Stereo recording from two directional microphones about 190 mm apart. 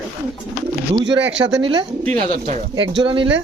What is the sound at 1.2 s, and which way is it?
Speech, 70° right (ahead or behind).